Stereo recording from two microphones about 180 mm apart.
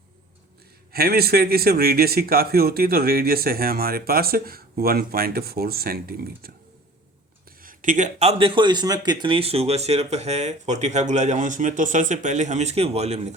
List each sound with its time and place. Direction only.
0.9 s speech: 60° right (ahead or behind)
7.6 s a man's voice: 50° right (ahead or behind)